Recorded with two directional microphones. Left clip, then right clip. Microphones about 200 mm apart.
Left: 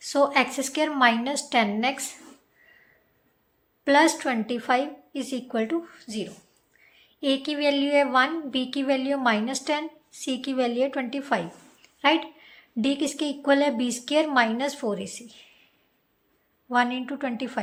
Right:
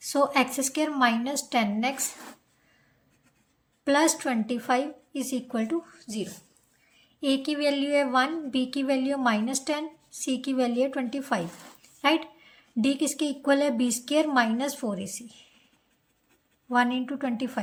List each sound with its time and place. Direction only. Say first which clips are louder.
0.0 s a woman's voice: left 2 dB; 20° right (ahead or behind)
3.8 s a woman's voice: left 4 dB; 20° right (ahead or behind)
16.6 s a woman's voice: left 1 dB; 20° right (ahead or behind)